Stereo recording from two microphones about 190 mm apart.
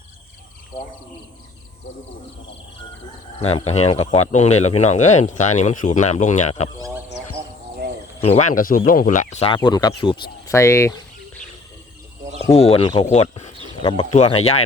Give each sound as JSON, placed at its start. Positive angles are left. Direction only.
{"t": 3.4, "sound": "speech", "side_deg": 35}
{"t": 6.7, "sound": "frog", "side_deg": -15}
{"t": 8.2, "sound": "speech", "side_deg": 35}
{"t": 9.6, "sound": "speech", "side_deg": 20}
{"t": 10.4, "sound": "a sound", "side_deg": 15}
{"t": 12.5, "sound": "speech", "side_deg": 30}
{"t": 13.1, "sound": "speech", "side_deg": 35}
{"t": 13.8, "sound": "speech", "side_deg": 25}